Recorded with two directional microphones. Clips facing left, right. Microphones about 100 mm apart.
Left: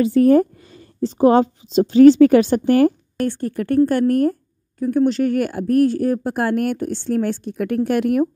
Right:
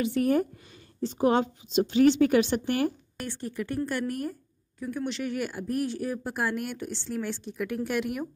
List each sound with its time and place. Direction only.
0.0 s a woman's voice: 40° left (ahead or behind)